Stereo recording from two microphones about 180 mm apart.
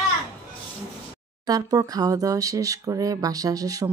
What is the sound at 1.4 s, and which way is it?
Speech, 20° right (ahead or behind).